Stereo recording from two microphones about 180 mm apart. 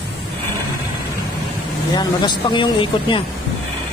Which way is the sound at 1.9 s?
25° left (ahead or behind).